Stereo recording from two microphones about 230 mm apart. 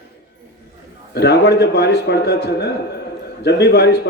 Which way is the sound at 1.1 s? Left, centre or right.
Left.